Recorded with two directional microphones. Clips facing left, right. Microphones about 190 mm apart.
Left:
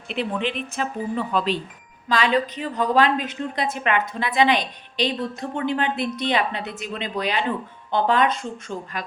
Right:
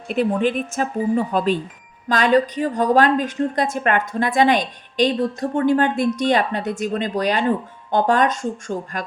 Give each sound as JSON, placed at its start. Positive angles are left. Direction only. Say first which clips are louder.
{"t": 0.1, "sound": "a woman's voice", "louder": "right 7 dB", "side_deg": -45}